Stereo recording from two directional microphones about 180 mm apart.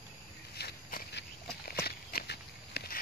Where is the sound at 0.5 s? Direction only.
65° left (ahead or behind).